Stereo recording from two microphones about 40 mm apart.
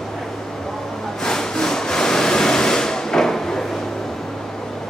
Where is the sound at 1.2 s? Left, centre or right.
Centre.